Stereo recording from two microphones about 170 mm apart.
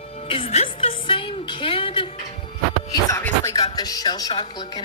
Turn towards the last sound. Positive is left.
turn(degrees=25)  # may be behind; listen again after turning